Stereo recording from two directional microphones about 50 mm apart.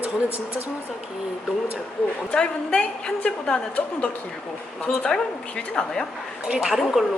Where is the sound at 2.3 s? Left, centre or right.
Centre.